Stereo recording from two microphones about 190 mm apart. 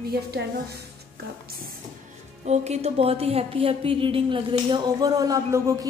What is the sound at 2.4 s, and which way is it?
Speech, 35° right (ahead or behind).